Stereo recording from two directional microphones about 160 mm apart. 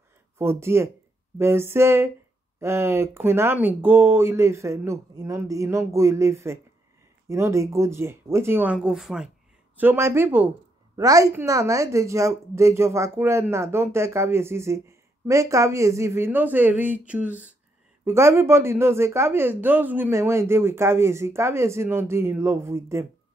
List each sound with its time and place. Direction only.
0.4 s a woman's voice: 15° right (ahead or behind)
9.8 s a woman's voice: 15° right (ahead or behind)